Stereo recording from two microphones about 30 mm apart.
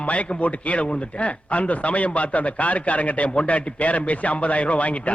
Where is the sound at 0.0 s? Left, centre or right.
Left.